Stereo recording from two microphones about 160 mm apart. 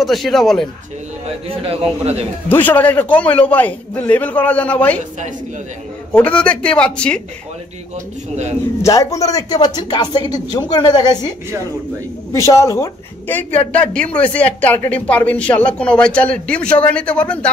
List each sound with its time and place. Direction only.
0.0 s speech: centre (ahead or behind)
1.5 s a man's voice: 40° right (ahead or behind)
2.5 s a woman's voice: 10° left (ahead or behind)
6.1 s a woman's voice: 5° left (ahead or behind)
8.8 s speech: 20° left (ahead or behind)
11.1 s a woman's voice: 15° right (ahead or behind)
12.3 s a woman's voice: 20° left (ahead or behind)